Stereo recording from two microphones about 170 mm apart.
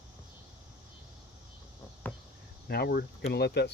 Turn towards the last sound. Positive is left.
turn(degrees=75)  # may be behind; listen again after turning